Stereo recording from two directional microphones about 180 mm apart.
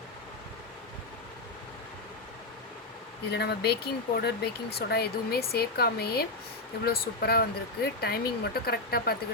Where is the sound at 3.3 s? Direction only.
65° left (ahead or behind).